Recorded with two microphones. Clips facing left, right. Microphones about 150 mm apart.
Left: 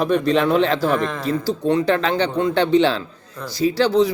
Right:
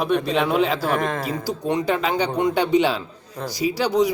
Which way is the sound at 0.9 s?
50° right (ahead or behind).